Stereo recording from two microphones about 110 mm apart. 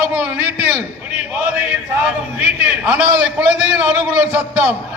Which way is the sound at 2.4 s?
15° right (ahead or behind).